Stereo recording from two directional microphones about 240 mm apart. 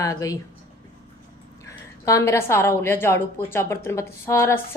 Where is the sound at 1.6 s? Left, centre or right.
Centre.